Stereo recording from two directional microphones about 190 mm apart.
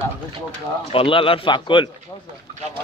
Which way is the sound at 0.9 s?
25° left (ahead or behind).